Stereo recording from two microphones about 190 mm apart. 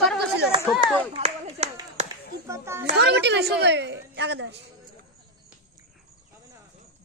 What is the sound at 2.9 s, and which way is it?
A woman's voice, 60° right (ahead or behind).